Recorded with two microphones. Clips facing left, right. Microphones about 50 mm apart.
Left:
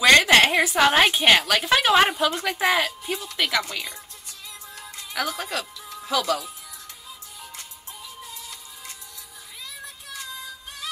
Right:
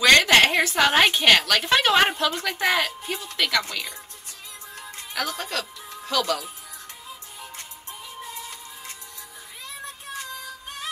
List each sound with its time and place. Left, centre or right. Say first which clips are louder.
0.0 s a woman's voice: left 1 dB; centre
5.1 s speech: left 1 dB; centre
8.3 s music: right 3 dB; right